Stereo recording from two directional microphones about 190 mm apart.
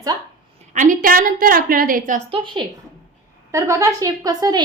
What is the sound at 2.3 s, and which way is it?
Speech, 25° right (ahead or behind).